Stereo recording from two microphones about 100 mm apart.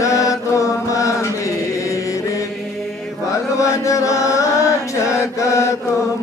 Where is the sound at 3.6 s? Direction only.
30° left (ahead or behind).